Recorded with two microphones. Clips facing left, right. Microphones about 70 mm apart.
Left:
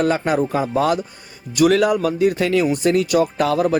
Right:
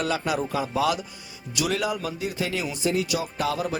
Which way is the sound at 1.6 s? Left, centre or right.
Left.